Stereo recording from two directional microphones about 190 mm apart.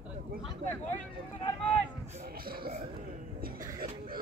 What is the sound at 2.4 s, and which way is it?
Speech, 50° right (ahead or behind).